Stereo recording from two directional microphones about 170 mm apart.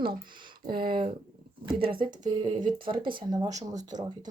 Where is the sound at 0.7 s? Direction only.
30° right (ahead or behind).